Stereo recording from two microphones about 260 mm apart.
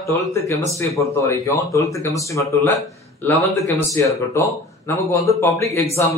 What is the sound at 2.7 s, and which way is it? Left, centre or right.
Speech, centre.